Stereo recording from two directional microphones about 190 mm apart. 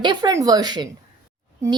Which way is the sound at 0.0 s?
20° right (ahead or behind).